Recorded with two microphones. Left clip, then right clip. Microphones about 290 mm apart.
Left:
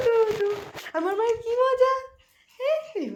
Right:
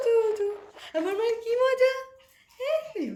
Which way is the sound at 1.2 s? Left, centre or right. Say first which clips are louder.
Left 2 dB; centre.